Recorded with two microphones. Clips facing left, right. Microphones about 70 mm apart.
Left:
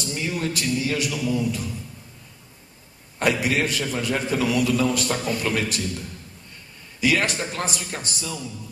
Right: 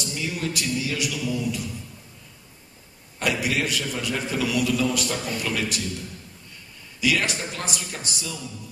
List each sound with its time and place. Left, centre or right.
0.0 s a man's voice: left
3.2 s a man's voice: left
7.0 s a man's voice: left